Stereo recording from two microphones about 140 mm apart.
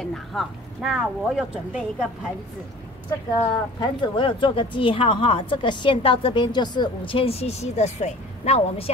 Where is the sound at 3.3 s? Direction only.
35° left (ahead or behind).